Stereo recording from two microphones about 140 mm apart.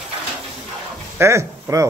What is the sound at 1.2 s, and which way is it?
Speech, 20° right (ahead or behind).